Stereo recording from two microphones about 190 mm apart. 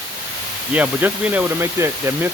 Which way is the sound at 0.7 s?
10° right (ahead or behind).